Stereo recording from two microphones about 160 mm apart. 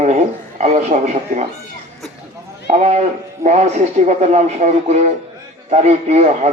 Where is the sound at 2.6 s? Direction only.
45° right (ahead or behind).